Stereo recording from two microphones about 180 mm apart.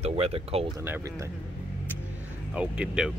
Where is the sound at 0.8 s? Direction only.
15° right (ahead or behind).